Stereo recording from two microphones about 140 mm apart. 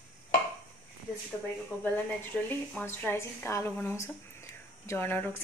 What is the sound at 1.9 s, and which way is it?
A woman's voice, 10° left (ahead or behind).